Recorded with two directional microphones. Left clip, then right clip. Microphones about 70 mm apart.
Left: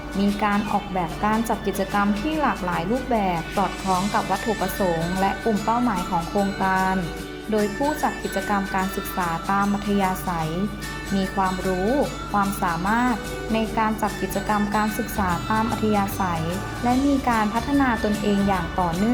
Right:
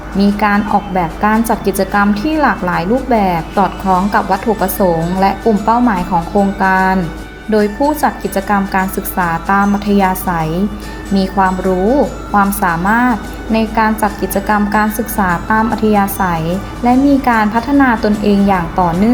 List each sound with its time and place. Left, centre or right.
0.2 s speech: centre
3.5 s speech: centre